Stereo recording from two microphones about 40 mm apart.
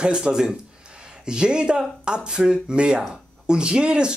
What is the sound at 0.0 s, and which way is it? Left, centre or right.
Speech, right.